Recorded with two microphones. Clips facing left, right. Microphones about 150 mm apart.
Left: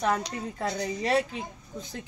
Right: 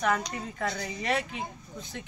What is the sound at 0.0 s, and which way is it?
Speech, 25° left (ahead or behind).